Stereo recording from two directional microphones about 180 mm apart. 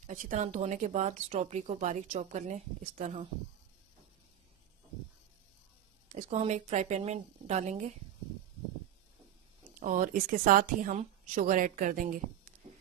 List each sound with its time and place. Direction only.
0.0 s speech: 45° right (ahead or behind)
6.0 s speech: 40° right (ahead or behind)
9.8 s a woman's voice: 45° right (ahead or behind)
12.6 s a sound: 40° right (ahead or behind)